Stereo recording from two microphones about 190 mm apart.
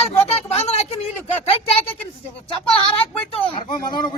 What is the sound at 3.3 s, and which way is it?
Speech, 30° left (ahead or behind).